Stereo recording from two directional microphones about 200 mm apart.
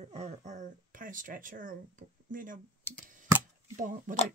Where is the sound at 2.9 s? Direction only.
10° left (ahead or behind).